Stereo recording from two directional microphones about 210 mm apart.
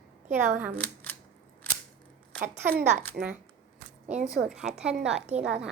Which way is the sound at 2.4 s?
45° right (ahead or behind).